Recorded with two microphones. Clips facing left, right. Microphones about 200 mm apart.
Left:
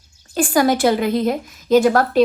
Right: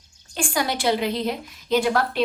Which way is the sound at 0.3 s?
45° left (ahead or behind).